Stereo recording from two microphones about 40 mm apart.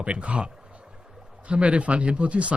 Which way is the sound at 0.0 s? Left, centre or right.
Right.